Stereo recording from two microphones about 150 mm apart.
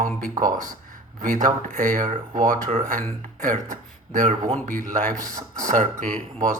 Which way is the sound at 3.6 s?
55° right (ahead or behind).